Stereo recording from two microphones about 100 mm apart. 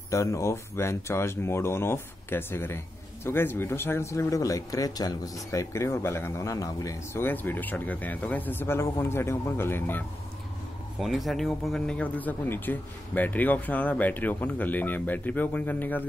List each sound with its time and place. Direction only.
0.1 s speech: 30° left (ahead or behind)
7.2 s speech: 20° left (ahead or behind)
11.0 s speech: centre (ahead or behind); by 16.0 s 15° left (ahead or behind)